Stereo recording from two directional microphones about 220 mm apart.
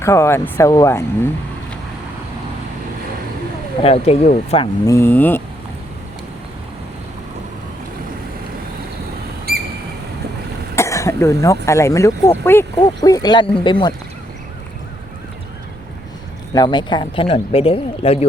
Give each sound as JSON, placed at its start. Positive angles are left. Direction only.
{"t": 0.0, "sound": "speech", "side_deg": 10}
{"t": 3.8, "sound": "speech", "side_deg": 25}
{"t": 4.9, "sound": "speech", "side_deg": 10}
{"t": 10.8, "sound": "speech", "side_deg": 15}
{"t": 16.6, "sound": "speech", "side_deg": 20}